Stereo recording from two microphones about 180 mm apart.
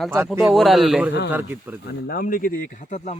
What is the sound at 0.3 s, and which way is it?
A man's voice, centre (ahead or behind).